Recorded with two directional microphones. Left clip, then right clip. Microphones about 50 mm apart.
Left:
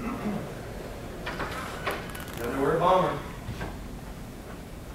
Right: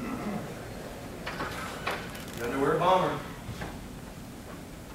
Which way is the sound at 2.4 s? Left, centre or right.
Centre.